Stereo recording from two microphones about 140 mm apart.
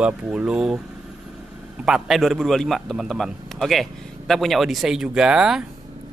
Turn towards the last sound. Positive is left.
turn(degrees=-5)  # may be behind; listen again after turning